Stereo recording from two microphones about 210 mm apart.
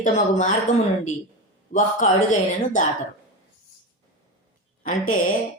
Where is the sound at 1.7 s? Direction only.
40° left (ahead or behind).